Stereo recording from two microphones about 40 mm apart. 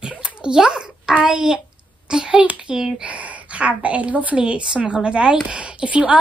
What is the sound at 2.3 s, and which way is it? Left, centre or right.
A woman's voice, right.